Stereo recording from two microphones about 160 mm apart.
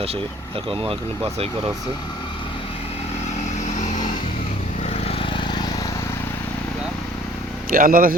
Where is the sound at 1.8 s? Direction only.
30° left (ahead or behind).